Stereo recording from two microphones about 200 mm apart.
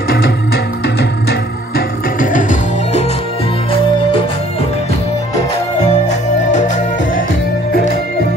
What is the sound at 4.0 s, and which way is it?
Music, 25° left (ahead or behind).